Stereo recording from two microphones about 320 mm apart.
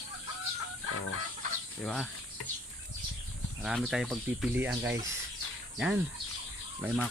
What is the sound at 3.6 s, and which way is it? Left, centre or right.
Speech, centre.